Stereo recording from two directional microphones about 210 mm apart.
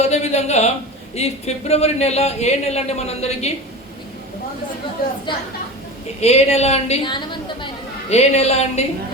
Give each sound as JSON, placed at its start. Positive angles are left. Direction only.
{"t": 0.0, "sound": "a sound", "side_deg": 30}
{"t": 1.1, "sound": "speech", "side_deg": 30}
{"t": 6.1, "sound": "speech", "side_deg": 30}